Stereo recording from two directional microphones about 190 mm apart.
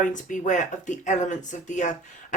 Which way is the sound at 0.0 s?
40° left (ahead or behind).